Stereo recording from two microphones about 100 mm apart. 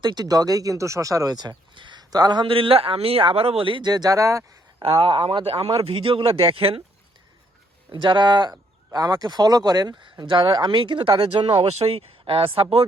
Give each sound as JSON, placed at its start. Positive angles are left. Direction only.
{"t": 0.0, "sound": "speech", "side_deg": -45}
{"t": 2.4, "sound": "speech", "side_deg": -65}
{"t": 4.8, "sound": "a man's voice", "side_deg": -65}
{"t": 7.9, "sound": "speech", "side_deg": -55}
{"t": 11.4, "sound": "a man's voice", "side_deg": -70}